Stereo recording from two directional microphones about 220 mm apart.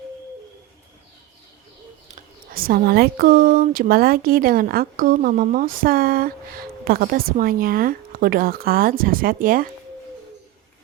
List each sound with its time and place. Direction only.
2.1 s speech: 40° right (ahead or behind)